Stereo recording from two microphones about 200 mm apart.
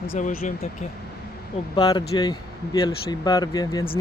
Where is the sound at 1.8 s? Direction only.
20° left (ahead or behind).